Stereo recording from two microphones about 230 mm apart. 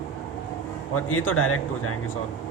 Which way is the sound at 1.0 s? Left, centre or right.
Left.